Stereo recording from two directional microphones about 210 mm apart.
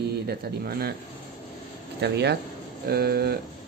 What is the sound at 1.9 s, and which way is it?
Speech, 50° right (ahead or behind).